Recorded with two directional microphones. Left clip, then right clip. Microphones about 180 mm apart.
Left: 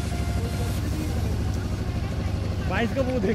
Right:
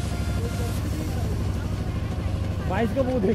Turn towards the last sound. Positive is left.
turn(degrees=-15)  # may be behind; listen again after turning